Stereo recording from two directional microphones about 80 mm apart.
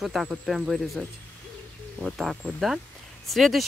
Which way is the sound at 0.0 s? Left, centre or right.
Centre.